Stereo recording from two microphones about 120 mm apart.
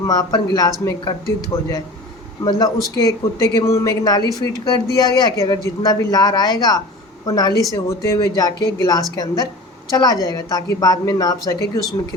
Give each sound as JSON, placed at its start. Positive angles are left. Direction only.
{"t": 0.0, "sound": "a man's voice", "side_deg": 30}